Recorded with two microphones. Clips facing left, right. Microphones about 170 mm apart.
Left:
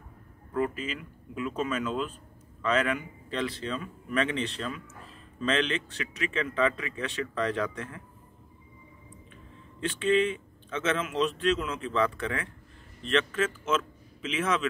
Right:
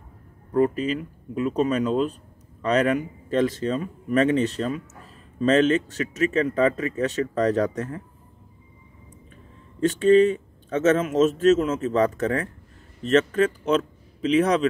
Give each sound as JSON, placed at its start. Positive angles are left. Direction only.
{"t": 0.5, "sound": "speech", "side_deg": -40}
{"t": 9.8, "sound": "speech", "side_deg": -40}